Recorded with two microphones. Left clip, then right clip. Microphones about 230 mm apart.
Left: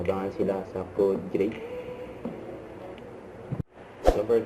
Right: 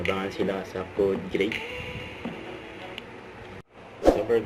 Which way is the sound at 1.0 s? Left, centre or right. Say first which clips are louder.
Even; right.